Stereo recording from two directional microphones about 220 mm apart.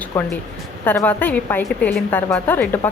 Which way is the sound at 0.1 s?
10° left (ahead or behind).